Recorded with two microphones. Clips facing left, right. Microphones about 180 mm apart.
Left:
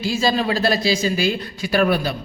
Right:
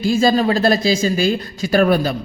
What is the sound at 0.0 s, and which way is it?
Speech, 50° right (ahead or behind).